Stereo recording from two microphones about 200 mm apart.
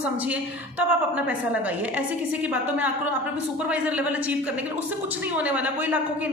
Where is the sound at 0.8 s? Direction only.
5° right (ahead or behind).